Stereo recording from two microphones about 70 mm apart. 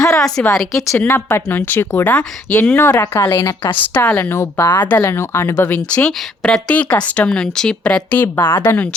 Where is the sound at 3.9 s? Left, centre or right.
Left.